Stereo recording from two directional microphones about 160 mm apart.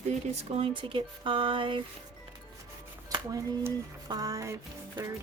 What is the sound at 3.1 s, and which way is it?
Speech, 25° right (ahead or behind).